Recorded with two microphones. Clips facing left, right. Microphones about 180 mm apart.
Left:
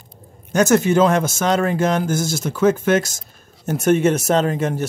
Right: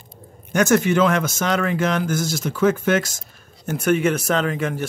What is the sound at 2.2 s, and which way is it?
Speech, 25° left (ahead or behind).